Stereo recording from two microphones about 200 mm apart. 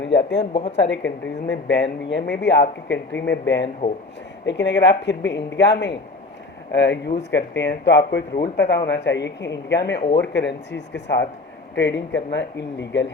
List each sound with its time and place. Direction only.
0.0 s speech: 60° left (ahead or behind)
1.5 s speech: 65° left (ahead or behind)